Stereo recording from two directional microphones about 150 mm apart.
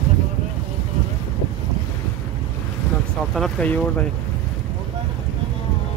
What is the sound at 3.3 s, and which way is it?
Speech, 5° left (ahead or behind).